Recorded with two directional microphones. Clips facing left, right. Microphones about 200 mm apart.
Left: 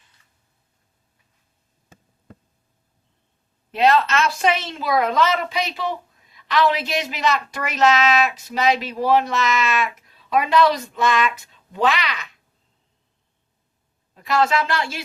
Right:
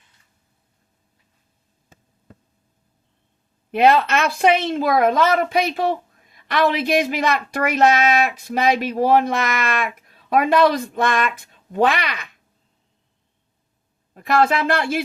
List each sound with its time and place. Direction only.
3.7 s a woman's voice: 55° right (ahead or behind)
14.1 s a woman's voice: 55° right (ahead or behind)